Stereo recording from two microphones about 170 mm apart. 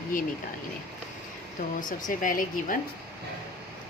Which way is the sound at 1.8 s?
50° left (ahead or behind).